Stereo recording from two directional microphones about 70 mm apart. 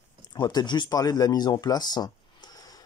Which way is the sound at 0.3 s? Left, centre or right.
Left.